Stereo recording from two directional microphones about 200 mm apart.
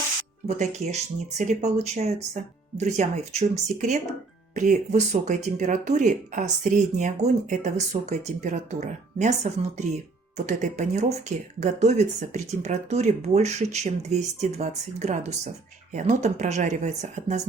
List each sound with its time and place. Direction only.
0.4 s speech: 35° right (ahead or behind)